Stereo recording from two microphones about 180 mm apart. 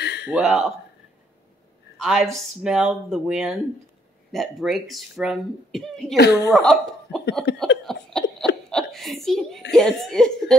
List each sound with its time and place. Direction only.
0.0 s a sound: 70° left (ahead or behind)
0.3 s speech: centre (ahead or behind)
2.0 s a woman's voice: 5° right (ahead or behind)
6.1 s speech: 65° left (ahead or behind)
6.5 s speech: centre (ahead or behind)
7.5 s speech: 70° left (ahead or behind)
7.8 s a sound: centre (ahead or behind)
8.6 s speech: 5° left (ahead or behind)